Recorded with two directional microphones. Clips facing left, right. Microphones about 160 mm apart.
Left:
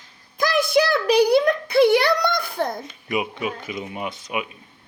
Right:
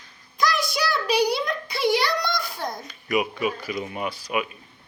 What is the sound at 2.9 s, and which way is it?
Speech, 25° left (ahead or behind).